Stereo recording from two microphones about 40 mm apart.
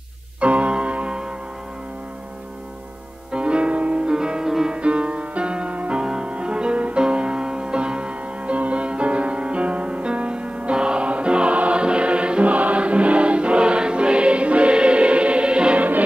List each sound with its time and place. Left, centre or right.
0.4 s music: right
3.3 s music: right
4.7 s music: right